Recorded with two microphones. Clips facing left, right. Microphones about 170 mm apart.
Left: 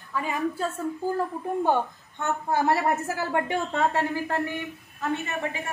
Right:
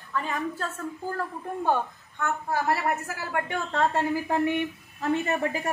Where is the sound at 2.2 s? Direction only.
25° left (ahead or behind).